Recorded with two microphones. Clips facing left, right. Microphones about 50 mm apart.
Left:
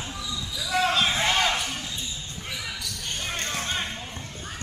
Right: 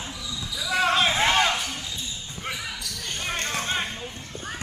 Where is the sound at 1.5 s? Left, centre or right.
Centre.